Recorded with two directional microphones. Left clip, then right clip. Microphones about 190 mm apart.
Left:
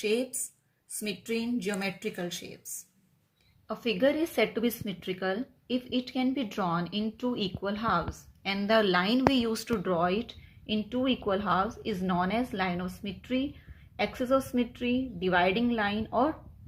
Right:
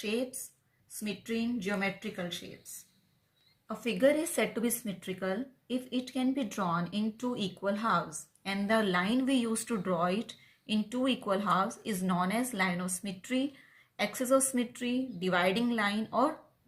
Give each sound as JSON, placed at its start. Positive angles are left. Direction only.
{"t": 1.0, "sound": "a woman's voice", "side_deg": 50}
{"t": 3.7, "sound": "a woman's voice", "side_deg": 45}